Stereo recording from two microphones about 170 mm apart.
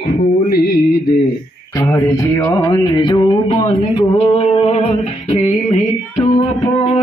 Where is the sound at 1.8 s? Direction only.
15° left (ahead or behind).